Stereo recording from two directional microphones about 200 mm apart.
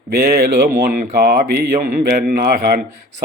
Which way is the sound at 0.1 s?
50° right (ahead or behind).